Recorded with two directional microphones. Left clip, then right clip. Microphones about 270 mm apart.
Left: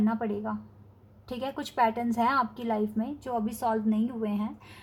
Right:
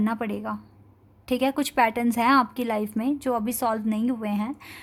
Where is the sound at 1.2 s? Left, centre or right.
Right.